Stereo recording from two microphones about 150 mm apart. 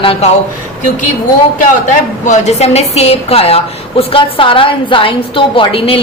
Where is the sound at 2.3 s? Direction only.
45° left (ahead or behind).